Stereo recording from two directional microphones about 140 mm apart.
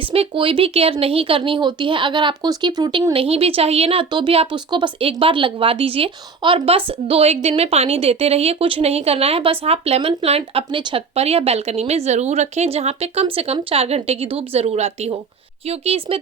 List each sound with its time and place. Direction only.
0.1 s speech: 40° right (ahead or behind)